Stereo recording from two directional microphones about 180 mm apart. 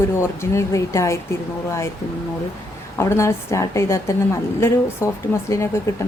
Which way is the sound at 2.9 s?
15° left (ahead or behind).